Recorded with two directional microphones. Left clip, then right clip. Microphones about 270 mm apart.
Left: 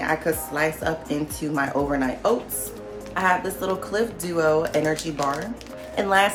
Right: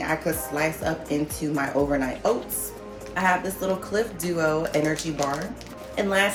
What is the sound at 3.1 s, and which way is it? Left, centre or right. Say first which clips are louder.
A woman's voice: left 1 dB; centre.